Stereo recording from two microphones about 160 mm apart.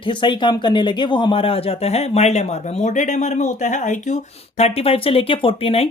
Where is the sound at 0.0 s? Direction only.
30° left (ahead or behind).